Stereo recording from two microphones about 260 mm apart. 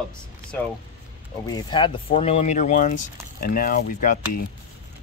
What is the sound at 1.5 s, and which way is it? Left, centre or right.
Speech, centre.